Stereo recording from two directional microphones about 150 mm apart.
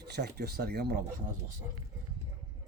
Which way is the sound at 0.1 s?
90° right.